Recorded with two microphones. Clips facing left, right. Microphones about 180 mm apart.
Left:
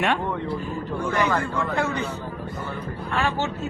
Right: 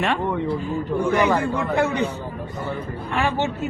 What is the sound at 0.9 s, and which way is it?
Speech, 15° right (ahead or behind).